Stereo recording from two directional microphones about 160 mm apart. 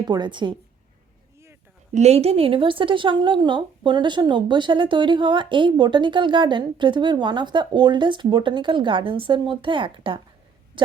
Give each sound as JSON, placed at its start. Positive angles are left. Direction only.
{"t": 0.0, "sound": "speech", "side_deg": -25}
{"t": 1.9, "sound": "speech", "side_deg": -45}
{"t": 10.8, "sound": "a sound", "side_deg": -30}